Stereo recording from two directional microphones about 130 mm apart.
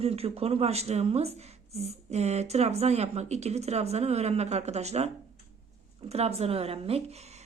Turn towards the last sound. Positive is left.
turn(degrees=-50)  # may be behind; listen again after turning